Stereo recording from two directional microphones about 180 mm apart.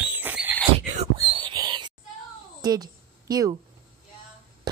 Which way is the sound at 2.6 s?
20° right (ahead or behind).